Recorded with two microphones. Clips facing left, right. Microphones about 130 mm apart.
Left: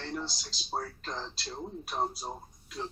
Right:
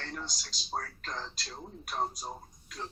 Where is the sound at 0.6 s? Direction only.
10° left (ahead or behind).